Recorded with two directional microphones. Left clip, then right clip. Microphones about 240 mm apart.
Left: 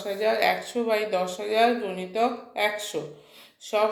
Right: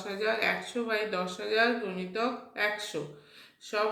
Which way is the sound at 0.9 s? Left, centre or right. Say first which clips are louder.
Left 6 dB; left.